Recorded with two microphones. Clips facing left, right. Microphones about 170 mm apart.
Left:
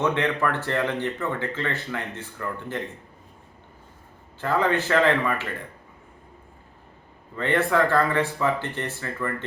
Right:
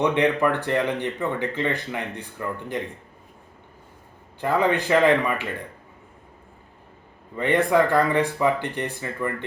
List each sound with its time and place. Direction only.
0.0 s speech: 15° right (ahead or behind)
4.4 s speech: 15° right (ahead or behind)
7.3 s speech: 15° right (ahead or behind)